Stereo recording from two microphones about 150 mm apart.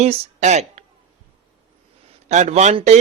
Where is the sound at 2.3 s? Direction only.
50° right (ahead or behind).